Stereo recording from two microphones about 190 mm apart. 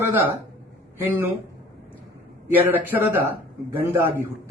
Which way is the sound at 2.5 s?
10° right (ahead or behind).